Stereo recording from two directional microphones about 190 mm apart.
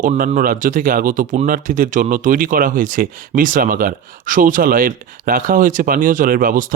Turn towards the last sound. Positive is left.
turn(degrees=-45)  # may be behind; listen again after turning